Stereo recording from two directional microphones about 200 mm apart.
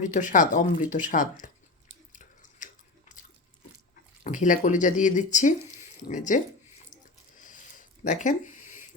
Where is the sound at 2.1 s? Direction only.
40° left (ahead or behind).